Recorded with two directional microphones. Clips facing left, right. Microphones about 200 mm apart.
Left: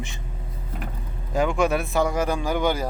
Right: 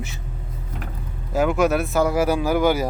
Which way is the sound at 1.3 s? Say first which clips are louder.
Right 3 dB; 5° right (ahead or behind).